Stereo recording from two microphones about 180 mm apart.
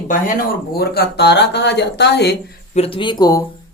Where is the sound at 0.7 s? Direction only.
60° left (ahead or behind).